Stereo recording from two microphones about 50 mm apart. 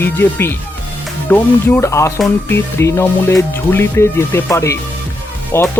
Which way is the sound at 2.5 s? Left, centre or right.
Left.